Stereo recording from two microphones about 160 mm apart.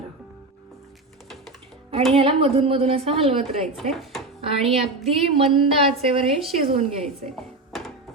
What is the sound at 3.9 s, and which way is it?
Speech, centre (ahead or behind).